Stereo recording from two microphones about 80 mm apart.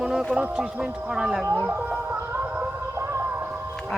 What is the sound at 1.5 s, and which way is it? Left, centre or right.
Music, right.